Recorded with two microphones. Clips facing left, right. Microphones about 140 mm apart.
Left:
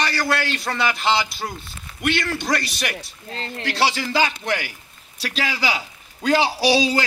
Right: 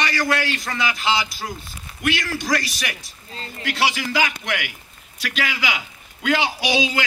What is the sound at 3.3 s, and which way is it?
Speech, 75° left (ahead or behind).